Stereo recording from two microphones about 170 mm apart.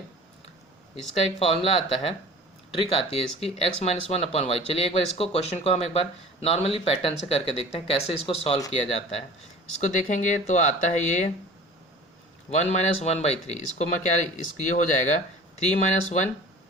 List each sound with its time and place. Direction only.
1.4 s speech: 35° left (ahead or behind)
9.8 s speech: 45° left (ahead or behind)
12.5 s speech: 40° left (ahead or behind)